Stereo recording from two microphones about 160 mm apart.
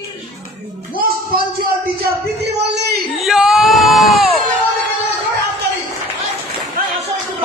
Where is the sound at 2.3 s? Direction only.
90° right.